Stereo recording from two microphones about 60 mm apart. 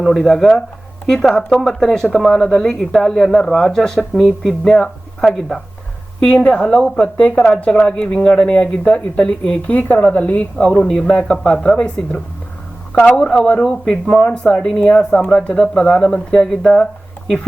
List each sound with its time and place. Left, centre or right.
0.2 s speech: centre
6.1 s speech: centre
13.1 s speech: centre